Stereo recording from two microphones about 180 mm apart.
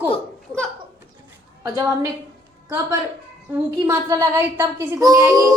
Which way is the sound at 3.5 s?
15° right (ahead or behind).